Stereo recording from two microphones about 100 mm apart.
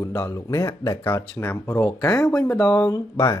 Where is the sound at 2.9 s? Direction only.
35° left (ahead or behind).